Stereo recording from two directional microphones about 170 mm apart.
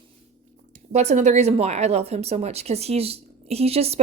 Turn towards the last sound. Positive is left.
turn(degrees=-35)  # may be behind; listen again after turning